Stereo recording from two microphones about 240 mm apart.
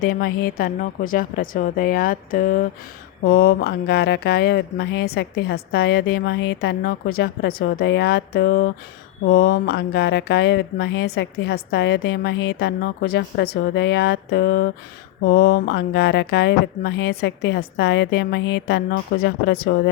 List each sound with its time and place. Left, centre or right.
0.0 s a woman's voice: left